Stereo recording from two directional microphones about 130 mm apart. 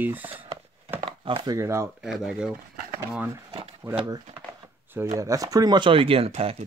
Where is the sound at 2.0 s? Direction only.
5° right (ahead or behind).